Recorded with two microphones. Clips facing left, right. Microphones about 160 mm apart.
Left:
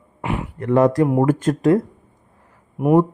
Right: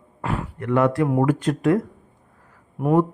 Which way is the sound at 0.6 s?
35° left (ahead or behind).